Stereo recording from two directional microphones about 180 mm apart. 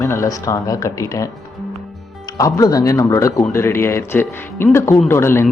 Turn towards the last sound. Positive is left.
turn(degrees=15)  # may be behind; listen again after turning